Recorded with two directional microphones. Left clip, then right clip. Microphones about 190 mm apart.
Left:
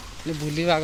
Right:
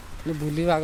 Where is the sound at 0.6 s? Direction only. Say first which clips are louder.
Left 1 dB; 10° right (ahead or behind).